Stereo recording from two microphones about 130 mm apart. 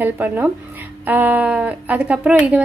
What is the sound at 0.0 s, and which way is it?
A woman's voice, 15° right (ahead or behind).